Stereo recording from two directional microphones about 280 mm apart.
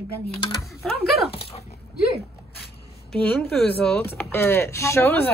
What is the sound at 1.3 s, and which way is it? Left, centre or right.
Dog, centre.